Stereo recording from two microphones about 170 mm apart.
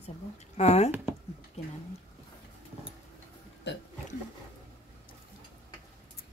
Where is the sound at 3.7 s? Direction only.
90° left.